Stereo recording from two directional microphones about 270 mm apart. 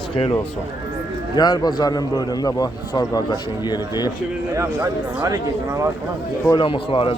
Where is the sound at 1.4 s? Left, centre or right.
Centre.